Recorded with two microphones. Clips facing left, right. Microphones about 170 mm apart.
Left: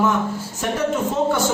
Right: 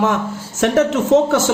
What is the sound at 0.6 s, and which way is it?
Speech, 90° right.